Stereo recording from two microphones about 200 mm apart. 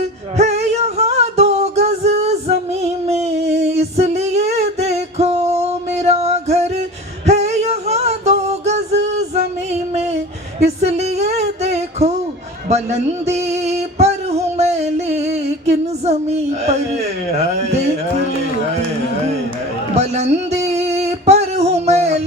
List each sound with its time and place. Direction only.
0.3 s music: 35° right (ahead or behind)
2.8 s female singing: 35° right (ahead or behind)
7.3 s a sound: 35° right (ahead or behind)
16.0 s speech: 35° right (ahead or behind)
19.9 s music: 35° right (ahead or behind)